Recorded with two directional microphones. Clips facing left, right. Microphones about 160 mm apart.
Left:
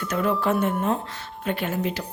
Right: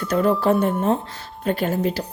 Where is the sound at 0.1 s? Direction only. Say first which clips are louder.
Right 5 dB; 35° right (ahead or behind).